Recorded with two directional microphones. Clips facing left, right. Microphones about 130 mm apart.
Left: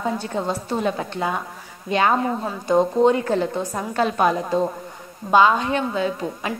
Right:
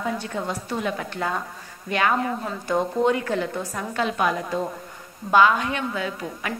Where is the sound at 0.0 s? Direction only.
30° left (ahead or behind).